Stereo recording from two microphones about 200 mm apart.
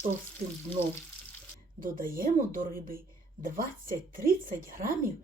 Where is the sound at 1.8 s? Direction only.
45° right (ahead or behind).